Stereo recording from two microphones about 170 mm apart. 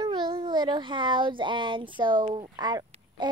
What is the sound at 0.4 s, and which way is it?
Speech, 25° right (ahead or behind).